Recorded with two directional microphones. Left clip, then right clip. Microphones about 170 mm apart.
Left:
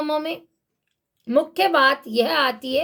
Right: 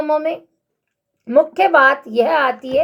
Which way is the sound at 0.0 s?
35° left (ahead or behind).